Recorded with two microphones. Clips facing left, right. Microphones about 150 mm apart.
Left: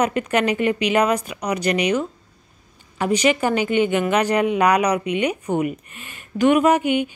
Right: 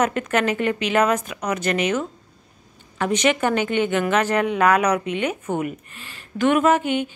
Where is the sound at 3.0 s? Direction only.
10° left (ahead or behind).